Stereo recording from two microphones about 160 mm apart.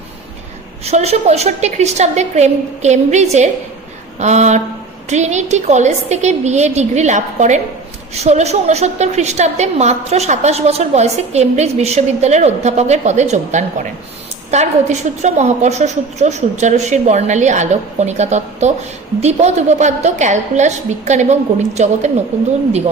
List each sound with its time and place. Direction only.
0.9 s a woman's voice: 45° right (ahead or behind)